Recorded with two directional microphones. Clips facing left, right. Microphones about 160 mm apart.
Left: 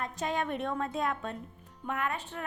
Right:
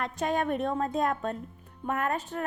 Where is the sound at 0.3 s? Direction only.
45° right (ahead or behind).